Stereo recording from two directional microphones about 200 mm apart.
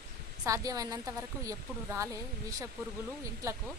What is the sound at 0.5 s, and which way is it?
A woman's voice, 15° right (ahead or behind).